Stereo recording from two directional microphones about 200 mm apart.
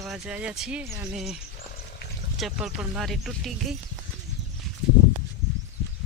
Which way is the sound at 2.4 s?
5° right (ahead or behind).